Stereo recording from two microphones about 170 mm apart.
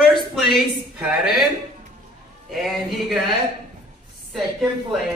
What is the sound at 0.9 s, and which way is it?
Speech, 5° right (ahead or behind).